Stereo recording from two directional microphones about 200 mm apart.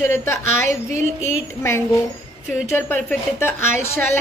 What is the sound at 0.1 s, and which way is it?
Speech, 10° left (ahead or behind).